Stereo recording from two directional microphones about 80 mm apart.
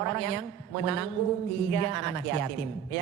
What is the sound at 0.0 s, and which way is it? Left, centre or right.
A man's voice, centre.